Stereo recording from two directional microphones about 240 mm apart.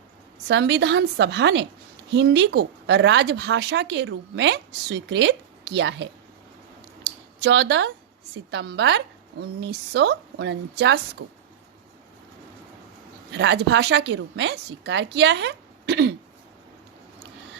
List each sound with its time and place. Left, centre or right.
0.4 s speech: right
7.0 s a sound: right
8.4 s speech: right
13.3 s speech: right